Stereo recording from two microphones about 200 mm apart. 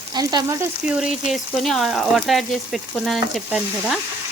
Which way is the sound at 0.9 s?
Centre (ahead or behind).